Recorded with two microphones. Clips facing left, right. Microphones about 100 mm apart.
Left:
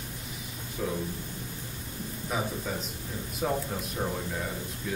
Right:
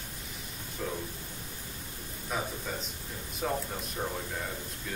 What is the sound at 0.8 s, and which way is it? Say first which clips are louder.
Speech: left 4 dB; 5° left (ahead or behind).